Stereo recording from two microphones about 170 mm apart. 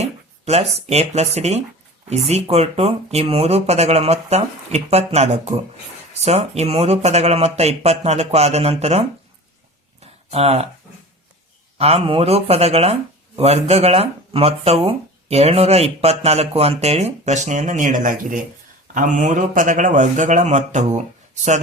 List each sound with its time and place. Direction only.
0.0 s speech: 40° right (ahead or behind)
10.0 s a sound: 35° right (ahead or behind)
11.8 s a man's voice: 35° right (ahead or behind)